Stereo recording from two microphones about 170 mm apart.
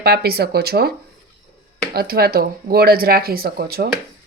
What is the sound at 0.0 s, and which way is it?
Speech, 70° right (ahead or behind).